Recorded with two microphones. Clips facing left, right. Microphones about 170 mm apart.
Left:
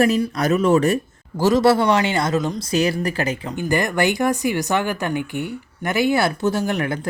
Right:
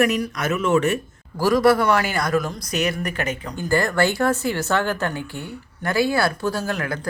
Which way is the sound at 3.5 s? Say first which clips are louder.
Right 2 dB; 20° left (ahead or behind).